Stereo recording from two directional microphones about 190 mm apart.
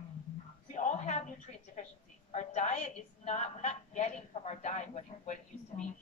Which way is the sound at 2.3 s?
35° left (ahead or behind).